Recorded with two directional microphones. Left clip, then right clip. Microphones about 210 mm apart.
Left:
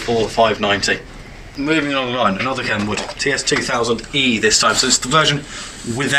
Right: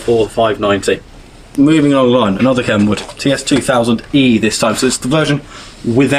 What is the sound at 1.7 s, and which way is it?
Speech, 65° right (ahead or behind).